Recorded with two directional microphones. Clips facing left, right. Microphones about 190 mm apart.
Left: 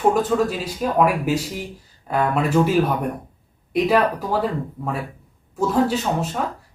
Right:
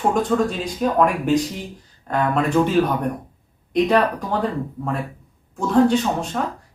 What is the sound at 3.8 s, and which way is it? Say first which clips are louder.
Speech: left 2 dB; 5° left (ahead or behind).